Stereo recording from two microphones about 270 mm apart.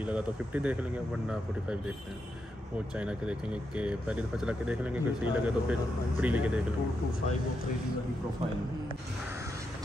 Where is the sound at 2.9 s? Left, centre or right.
Centre.